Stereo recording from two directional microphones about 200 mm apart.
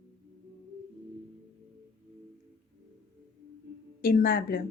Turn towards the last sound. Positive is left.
turn(degrees=45)  # may be behind; listen again after turning